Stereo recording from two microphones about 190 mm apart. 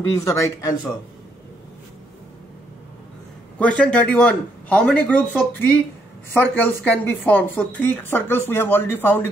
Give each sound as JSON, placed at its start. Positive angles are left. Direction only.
{"t": 0.1, "sound": "speech", "side_deg": 15}
{"t": 3.5, "sound": "a man's voice", "side_deg": 5}